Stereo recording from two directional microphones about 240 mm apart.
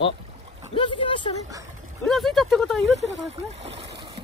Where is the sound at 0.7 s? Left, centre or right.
Left.